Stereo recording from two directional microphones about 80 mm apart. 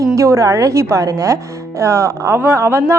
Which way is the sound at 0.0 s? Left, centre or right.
Right.